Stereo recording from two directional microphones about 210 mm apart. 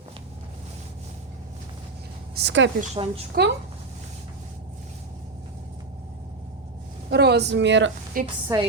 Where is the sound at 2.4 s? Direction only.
60° right (ahead or behind).